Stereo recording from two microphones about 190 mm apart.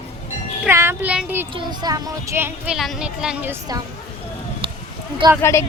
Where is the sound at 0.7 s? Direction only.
10° right (ahead or behind).